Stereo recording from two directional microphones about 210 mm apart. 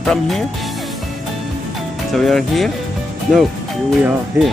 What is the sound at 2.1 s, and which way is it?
Speech, centre (ahead or behind).